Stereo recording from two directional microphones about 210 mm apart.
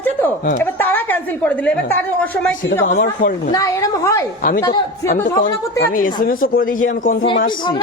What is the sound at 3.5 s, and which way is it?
A woman's voice, 15° left (ahead or behind).